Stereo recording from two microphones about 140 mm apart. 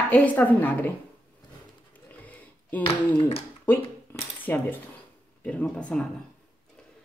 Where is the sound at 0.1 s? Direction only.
10° left (ahead or behind).